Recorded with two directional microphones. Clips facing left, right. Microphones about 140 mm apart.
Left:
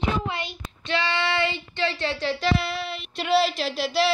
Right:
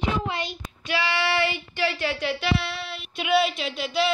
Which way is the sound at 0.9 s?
20° left (ahead or behind).